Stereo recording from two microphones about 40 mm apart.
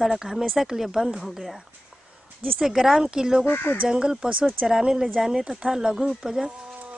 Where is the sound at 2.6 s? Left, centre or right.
Centre.